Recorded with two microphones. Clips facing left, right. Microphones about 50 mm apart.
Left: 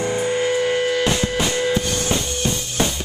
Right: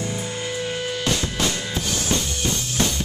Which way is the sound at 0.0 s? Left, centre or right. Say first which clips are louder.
Left 8 dB; left.